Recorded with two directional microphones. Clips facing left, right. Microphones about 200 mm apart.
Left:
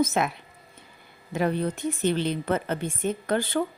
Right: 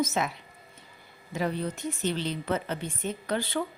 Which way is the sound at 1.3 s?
55° left (ahead or behind).